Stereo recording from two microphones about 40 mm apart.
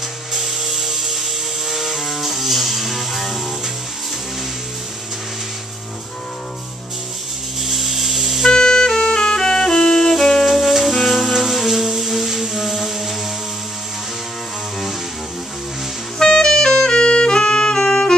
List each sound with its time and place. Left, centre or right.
0.3 s music: centre
7.6 s vehicle: centre
8.5 s music: centre
16.2 s saxophone: centre